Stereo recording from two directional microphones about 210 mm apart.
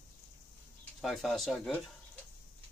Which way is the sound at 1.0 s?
Centre (ahead or behind).